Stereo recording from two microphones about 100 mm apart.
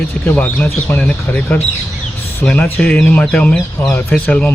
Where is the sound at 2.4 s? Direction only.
15° left (ahead or behind).